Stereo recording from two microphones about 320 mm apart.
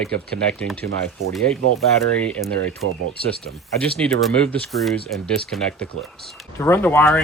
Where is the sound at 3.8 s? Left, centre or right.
Centre.